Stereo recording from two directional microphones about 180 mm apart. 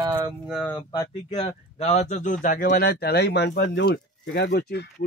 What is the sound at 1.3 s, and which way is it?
Speech, 35° left (ahead or behind).